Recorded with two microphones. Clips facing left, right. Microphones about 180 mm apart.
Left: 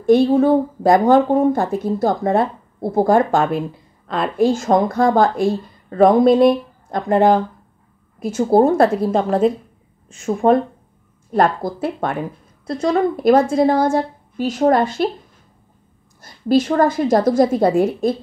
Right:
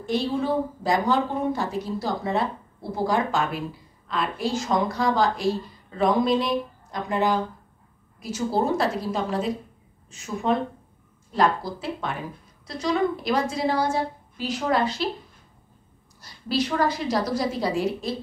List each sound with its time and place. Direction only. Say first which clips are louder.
0.0 s a woman's voice: left 12 dB; 50° left (ahead or behind)
16.2 s a woman's voice: left 10 dB; 50° left (ahead or behind)